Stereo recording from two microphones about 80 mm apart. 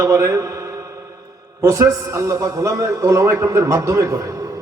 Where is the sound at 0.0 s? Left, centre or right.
Right.